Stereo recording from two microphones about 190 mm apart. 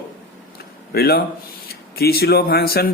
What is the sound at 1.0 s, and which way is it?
Speech, 55° left (ahead or behind).